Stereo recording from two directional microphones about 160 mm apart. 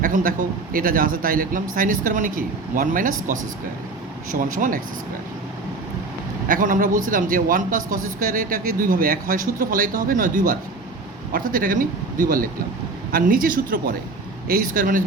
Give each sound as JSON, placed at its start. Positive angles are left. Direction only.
{"t": 0.0, "sound": "a man's voice", "side_deg": -60}
{"t": 6.5, "sound": "a man's voice", "side_deg": -55}
{"t": 13.1, "sound": "a man's voice", "side_deg": -60}